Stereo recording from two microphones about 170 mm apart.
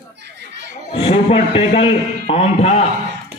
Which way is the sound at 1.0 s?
35° left (ahead or behind).